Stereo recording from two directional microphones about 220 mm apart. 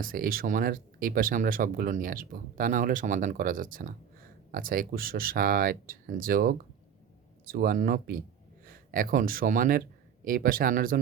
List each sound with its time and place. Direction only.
0.0 s speech: 40° right (ahead or behind)